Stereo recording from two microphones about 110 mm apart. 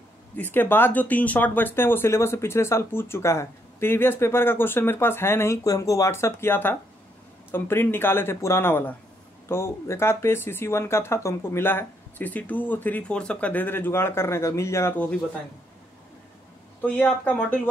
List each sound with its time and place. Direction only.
0.4 s speech: 20° left (ahead or behind)
16.8 s speech: 15° left (ahead or behind)